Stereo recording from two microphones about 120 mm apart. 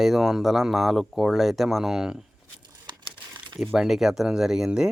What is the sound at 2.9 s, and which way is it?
Crumpling, 40° right (ahead or behind).